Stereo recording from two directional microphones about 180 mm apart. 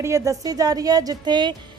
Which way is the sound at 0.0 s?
15° right (ahead or behind).